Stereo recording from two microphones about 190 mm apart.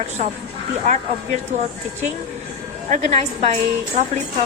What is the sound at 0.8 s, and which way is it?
Speech, 35° right (ahead or behind).